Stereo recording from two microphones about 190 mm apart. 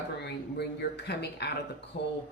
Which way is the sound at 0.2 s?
60° left (ahead or behind).